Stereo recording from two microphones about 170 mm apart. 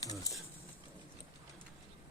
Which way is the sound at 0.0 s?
20° left (ahead or behind).